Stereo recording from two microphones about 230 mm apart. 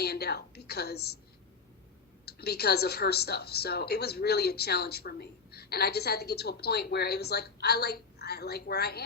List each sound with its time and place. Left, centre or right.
0.0 s a woman's voice: left
2.2 s a woman's voice: left